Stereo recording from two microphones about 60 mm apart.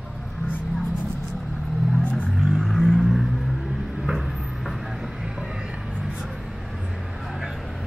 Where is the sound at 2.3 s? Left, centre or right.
Centre.